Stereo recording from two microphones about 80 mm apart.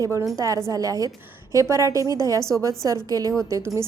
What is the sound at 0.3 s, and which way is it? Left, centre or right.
A woman's voice, right.